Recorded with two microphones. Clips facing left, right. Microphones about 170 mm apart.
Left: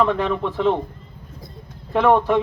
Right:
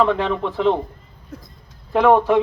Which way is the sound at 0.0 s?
15° right (ahead or behind).